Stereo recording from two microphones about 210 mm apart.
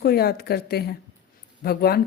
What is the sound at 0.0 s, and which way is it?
A woman's voice, 50° left (ahead or behind).